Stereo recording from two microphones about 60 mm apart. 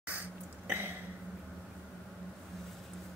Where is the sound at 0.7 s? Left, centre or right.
Right.